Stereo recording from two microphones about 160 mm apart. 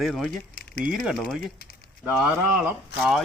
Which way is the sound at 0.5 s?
70° left (ahead or behind).